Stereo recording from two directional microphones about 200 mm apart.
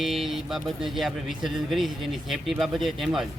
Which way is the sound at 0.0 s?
Centre (ahead or behind).